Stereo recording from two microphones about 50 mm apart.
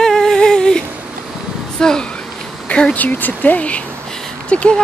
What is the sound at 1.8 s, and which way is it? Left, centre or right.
Speech, centre.